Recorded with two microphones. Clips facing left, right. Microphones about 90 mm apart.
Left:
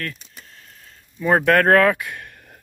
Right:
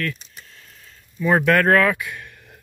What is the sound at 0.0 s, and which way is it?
Speech, 35° left (ahead or behind).